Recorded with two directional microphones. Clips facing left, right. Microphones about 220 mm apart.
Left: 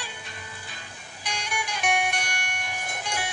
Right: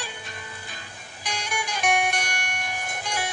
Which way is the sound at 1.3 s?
45° right (ahead or behind).